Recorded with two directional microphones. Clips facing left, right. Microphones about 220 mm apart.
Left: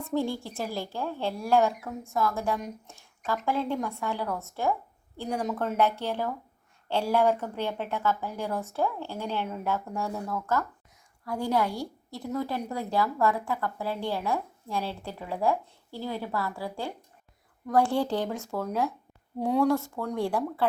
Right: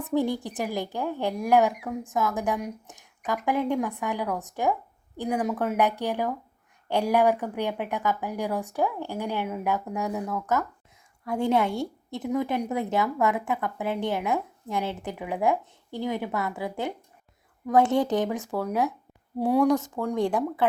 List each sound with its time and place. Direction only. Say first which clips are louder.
0.0 s a woman's voice: right 3 dB; 15° right (ahead or behind)